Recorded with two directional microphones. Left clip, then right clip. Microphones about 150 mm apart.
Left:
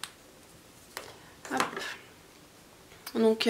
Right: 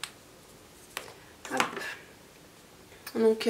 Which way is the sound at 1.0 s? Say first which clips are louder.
Right 2 dB; centre (ahead or behind).